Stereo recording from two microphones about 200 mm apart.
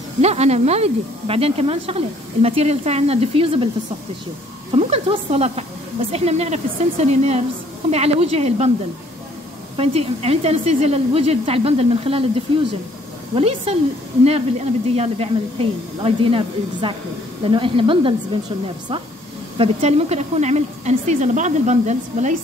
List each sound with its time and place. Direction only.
0.2 s speech: 30° right (ahead or behind)
4.7 s speech: 30° right (ahead or behind)
9.8 s a woman's voice: 30° right (ahead or behind)
19.6 s speech: 30° right (ahead or behind)